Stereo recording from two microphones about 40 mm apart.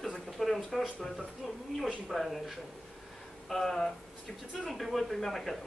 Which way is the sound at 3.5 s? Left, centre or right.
Centre.